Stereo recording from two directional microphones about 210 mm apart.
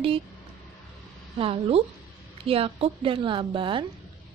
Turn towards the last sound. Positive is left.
turn(degrees=-25)  # may be behind; listen again after turning